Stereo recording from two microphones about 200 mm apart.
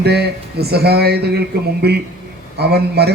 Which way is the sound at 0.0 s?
55° right (ahead or behind).